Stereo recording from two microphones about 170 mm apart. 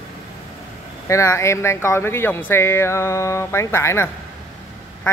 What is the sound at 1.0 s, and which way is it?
Speech, 20° left (ahead or behind).